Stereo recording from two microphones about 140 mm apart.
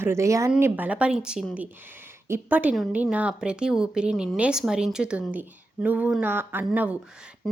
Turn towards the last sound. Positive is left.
turn(degrees=-10)  # may be behind; listen again after turning